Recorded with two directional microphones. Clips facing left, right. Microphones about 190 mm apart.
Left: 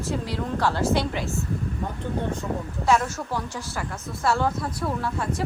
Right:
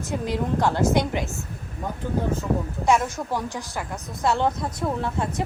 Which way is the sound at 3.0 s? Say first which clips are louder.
Right 2 dB; 15° right (ahead or behind).